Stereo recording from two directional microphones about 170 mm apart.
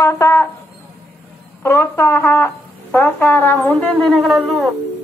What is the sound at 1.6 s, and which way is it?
Speech, 15° left (ahead or behind).